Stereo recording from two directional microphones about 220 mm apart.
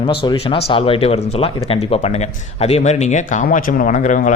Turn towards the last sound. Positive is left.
turn(degrees=35)  # may be behind; listen again after turning